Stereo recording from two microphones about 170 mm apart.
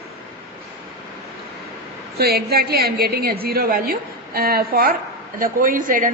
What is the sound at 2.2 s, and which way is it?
A woman's voice, 65° right (ahead or behind).